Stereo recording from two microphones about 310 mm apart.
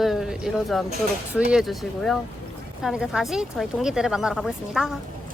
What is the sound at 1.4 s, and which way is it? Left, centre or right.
Speech, centre.